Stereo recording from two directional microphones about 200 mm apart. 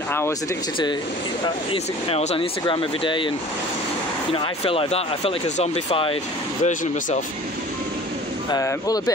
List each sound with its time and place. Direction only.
1.7 s speech: 30° left (ahead or behind)
4.3 s speech: 25° left (ahead or behind)
6.6 s speech: 40° left (ahead or behind)
8.5 s speech: 15° left (ahead or behind)